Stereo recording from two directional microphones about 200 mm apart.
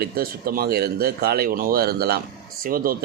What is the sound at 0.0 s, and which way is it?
Speech, 45° right (ahead or behind).